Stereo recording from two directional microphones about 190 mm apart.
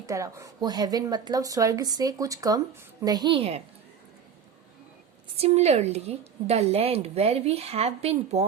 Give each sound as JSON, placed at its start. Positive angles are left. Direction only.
{"t": 0.0, "sound": "a woman's voice", "side_deg": -15}
{"t": 5.4, "sound": "a woman's voice", "side_deg": -35}